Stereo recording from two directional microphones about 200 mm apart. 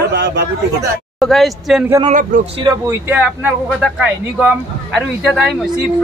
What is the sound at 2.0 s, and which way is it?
Speech, 35° right (ahead or behind).